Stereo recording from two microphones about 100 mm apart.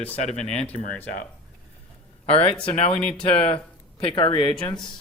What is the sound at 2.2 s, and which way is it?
Speech, 75° left (ahead or behind).